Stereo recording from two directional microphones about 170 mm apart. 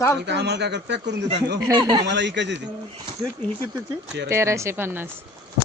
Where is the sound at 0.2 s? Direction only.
80° right.